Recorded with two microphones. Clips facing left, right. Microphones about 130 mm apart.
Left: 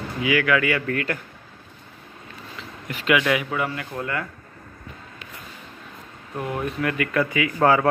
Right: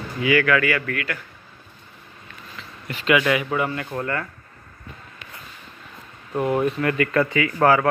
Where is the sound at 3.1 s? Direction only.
Centre (ahead or behind).